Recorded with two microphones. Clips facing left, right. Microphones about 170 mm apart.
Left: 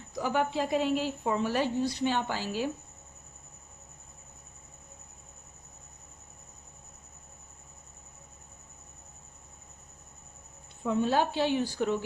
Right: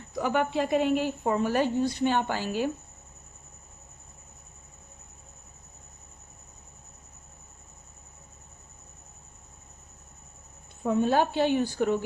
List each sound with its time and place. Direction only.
0.2 s a woman's voice: 60° right (ahead or behind)
10.8 s a woman's voice: 50° right (ahead or behind)